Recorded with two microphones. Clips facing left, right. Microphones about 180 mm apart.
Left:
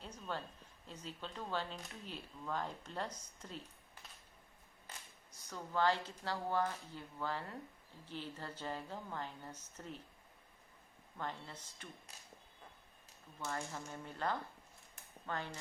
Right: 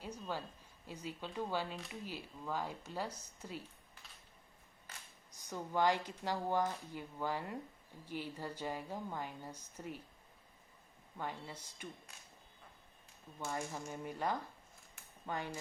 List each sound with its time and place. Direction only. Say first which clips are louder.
0.0 s a sound: right 2 dB; 10° right (ahead or behind)
0.9 s speech: right 3 dB; 10° right (ahead or behind)
5.3 s speech: right 2 dB; 15° right (ahead or behind)
11.2 s speech: right 1 dB; 10° right (ahead or behind)
13.4 s speech: right 2 dB; 10° right (ahead or behind)